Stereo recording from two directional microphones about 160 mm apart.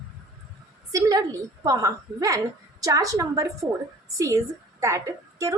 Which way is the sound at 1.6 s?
20° right (ahead or behind).